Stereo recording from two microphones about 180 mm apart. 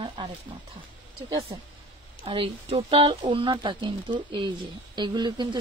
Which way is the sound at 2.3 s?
30° right (ahead or behind).